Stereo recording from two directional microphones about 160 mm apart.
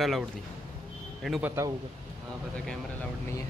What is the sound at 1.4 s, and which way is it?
Speech, 15° right (ahead or behind).